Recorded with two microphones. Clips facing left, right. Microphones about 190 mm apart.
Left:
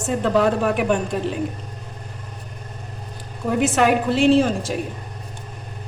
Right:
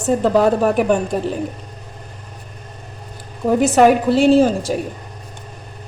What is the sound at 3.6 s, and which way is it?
A woman's voice, 40° right (ahead or behind).